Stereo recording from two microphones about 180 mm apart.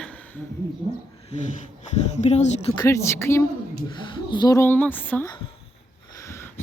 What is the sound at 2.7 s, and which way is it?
Speech, 20° left (ahead or behind).